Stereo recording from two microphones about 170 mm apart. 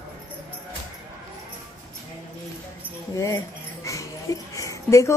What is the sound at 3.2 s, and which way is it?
Speech, 20° left (ahead or behind).